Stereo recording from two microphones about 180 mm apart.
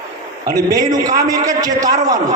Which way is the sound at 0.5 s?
20° right (ahead or behind).